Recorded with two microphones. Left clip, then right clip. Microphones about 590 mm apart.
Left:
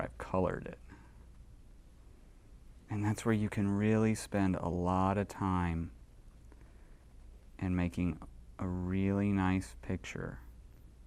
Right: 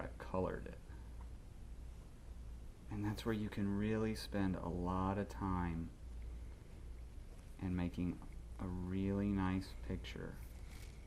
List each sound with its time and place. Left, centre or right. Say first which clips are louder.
0.0 s a sound: left 8 dB; left
2.9 s speech: left 8 dB; left
7.5 s speech: left 7 dB; left